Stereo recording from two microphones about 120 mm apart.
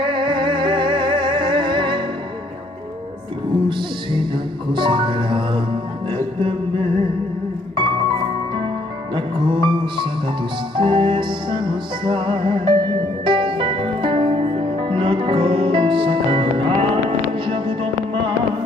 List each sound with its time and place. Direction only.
0.0 s music: 45° right (ahead or behind)
3.6 s music: 40° right (ahead or behind)